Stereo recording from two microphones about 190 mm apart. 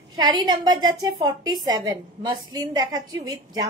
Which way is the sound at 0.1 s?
20° right (ahead or behind).